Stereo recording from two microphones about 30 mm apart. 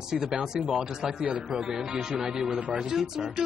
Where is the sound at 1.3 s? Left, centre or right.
Right.